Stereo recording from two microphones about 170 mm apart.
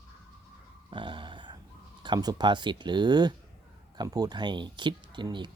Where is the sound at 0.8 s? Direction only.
30° right (ahead or behind).